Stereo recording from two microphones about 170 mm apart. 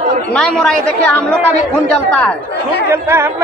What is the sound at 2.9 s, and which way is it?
Speech, 15° right (ahead or behind).